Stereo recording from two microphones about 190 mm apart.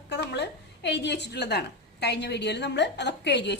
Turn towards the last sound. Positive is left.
turn(degrees=65)  # may be behind; listen again after turning